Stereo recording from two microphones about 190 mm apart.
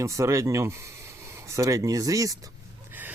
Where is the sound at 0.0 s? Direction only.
15° right (ahead or behind).